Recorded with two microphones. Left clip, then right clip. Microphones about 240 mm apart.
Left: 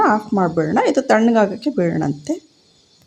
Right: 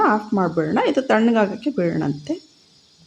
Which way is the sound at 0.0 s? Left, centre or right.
Centre.